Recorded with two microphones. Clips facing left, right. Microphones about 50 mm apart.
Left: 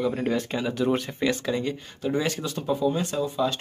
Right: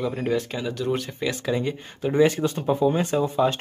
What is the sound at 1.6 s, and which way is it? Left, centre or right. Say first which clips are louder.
Speech: right 2 dB; centre.